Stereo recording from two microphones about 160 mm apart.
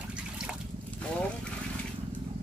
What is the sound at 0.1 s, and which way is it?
Water, 5° right (ahead or behind).